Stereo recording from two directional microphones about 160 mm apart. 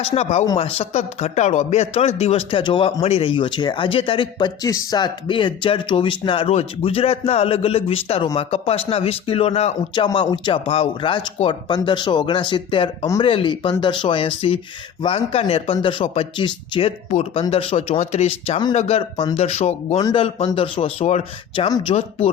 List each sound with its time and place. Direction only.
0.0 s a man's voice: 40° left (ahead or behind)
17.1 s a man's voice: 45° left (ahead or behind)